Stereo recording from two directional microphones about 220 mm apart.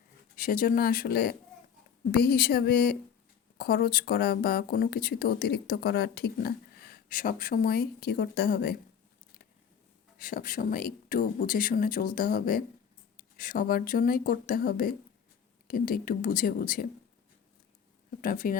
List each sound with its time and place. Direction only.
0.3 s speech: 40° left (ahead or behind)
10.2 s speech: 40° left (ahead or behind)
18.2 s speech: 40° left (ahead or behind)